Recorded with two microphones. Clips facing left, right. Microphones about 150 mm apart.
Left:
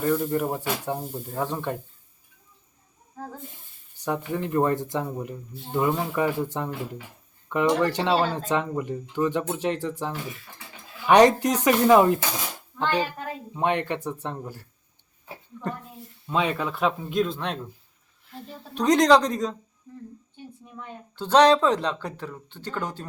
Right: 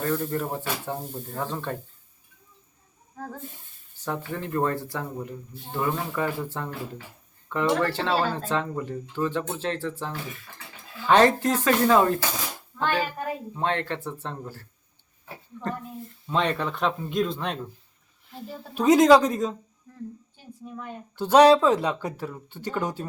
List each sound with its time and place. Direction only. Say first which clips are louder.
0.0 s speech: left 3 dB; 10° left (ahead or behind)
3.9 s speech: left 3 dB; 15° left (ahead or behind)
16.2 s speech: even; 5° left (ahead or behind)
20.7 s speech: right 3 dB; 10° right (ahead or behind)